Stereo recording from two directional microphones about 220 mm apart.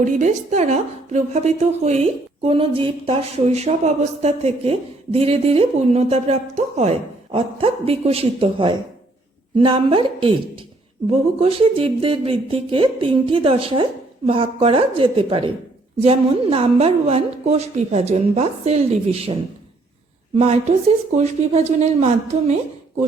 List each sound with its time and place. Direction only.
0.0 s a woman's voice: 35° right (ahead or behind)